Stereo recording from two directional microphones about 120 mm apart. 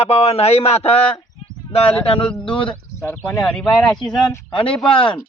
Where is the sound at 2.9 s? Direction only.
15° left (ahead or behind).